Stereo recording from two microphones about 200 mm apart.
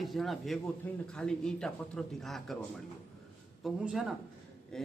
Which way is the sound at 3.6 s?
Centre (ahead or behind).